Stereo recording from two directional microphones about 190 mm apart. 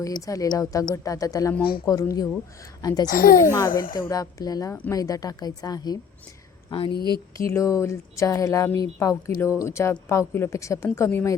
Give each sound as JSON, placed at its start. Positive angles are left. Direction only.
{"t": 0.0, "sound": "speech", "side_deg": 20}
{"t": 3.1, "sound": "a child's voice", "side_deg": 45}
{"t": 3.9, "sound": "speech", "side_deg": 20}
{"t": 7.3, "sound": "speech", "side_deg": 15}